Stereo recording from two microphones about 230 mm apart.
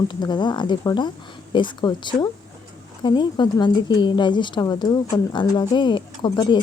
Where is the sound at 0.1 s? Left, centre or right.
Centre.